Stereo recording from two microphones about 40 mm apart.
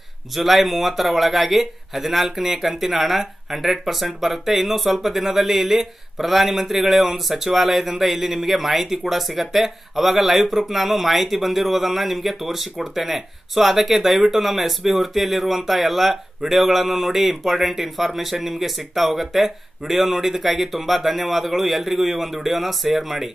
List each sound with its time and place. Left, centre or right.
0.4 s a man's voice: centre